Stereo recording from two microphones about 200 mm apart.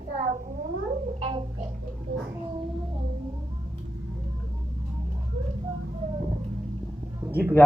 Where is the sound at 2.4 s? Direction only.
25° right (ahead or behind).